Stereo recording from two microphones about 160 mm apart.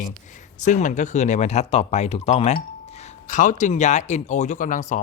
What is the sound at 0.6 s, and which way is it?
Speech, 50° left (ahead or behind).